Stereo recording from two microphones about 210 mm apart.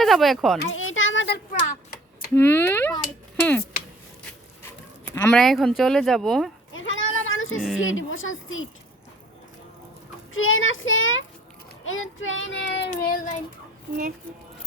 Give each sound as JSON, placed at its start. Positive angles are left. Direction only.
{"t": 0.0, "sound": "speech", "side_deg": 0}
{"t": 0.7, "sound": "a sound", "side_deg": 70}
{"t": 2.3, "sound": "speech", "side_deg": 10}
{"t": 4.6, "sound": "speech", "side_deg": 10}
{"t": 6.7, "sound": "a sound", "side_deg": 65}
{"t": 7.8, "sound": "speech", "side_deg": 70}
{"t": 10.3, "sound": "speech", "side_deg": 70}
{"t": 12.4, "sound": "child singing", "side_deg": 60}
{"t": 12.9, "sound": "child singing", "side_deg": 45}